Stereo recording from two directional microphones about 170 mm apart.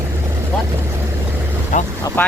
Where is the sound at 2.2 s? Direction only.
10° left (ahead or behind).